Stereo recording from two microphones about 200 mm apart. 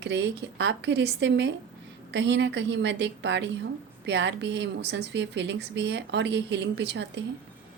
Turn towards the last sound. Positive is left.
turn(degrees=-60)  # may be behind; listen again after turning